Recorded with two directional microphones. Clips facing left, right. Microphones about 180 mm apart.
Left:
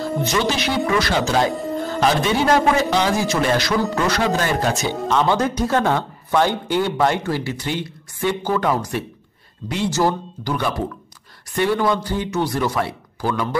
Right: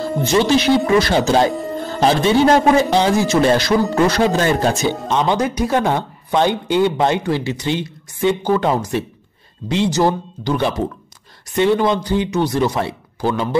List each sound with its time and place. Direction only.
0.2 s speech: 30° right (ahead or behind)
1.5 s music: centre (ahead or behind)
2.0 s speech: 30° right (ahead or behind)
5.0 s speech: 20° right (ahead or behind)